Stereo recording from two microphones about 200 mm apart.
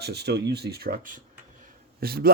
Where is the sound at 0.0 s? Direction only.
55° right (ahead or behind).